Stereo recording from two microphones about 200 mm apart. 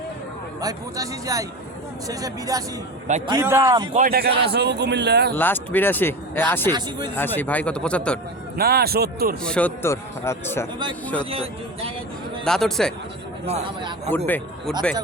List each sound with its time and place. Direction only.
0.6 s speech: 15° right (ahead or behind)
3.9 s a man's voice: 50° right (ahead or behind)
5.4 s speech: 10° left (ahead or behind)
6.7 s speech: 20° right (ahead or behind)
7.2 s speech: 10° left (ahead or behind)
8.5 s speech: 50° right (ahead or behind)
9.4 s speech: 5° left (ahead or behind)
11.3 s speech: 30° right (ahead or behind)
12.5 s a man's voice: centre (ahead or behind)
13.4 s speech: 30° right (ahead or behind)
14.3 s speech: 10° left (ahead or behind)